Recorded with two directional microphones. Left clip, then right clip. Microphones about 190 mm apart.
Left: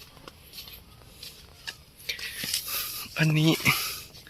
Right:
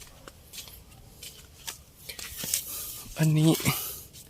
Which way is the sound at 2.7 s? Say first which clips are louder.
Left 5 dB; 15° right (ahead or behind).